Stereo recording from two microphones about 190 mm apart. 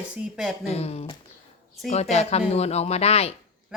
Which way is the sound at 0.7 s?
35° left (ahead or behind).